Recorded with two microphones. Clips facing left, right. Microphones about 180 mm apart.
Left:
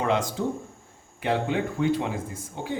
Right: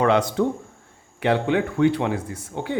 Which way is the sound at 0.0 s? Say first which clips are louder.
Right 6 dB; 65° right (ahead or behind).